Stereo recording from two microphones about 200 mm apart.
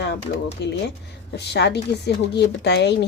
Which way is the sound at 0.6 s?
60° left (ahead or behind).